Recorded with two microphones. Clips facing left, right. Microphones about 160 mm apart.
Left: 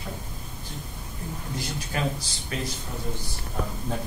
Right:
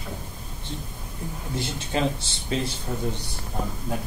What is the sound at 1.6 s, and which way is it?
A man's voice, 25° right (ahead or behind).